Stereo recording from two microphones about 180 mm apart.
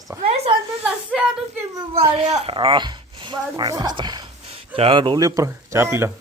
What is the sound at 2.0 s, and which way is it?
A woman's voice, 35° right (ahead or behind).